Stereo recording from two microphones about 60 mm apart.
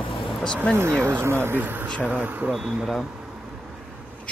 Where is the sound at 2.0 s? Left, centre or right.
Right.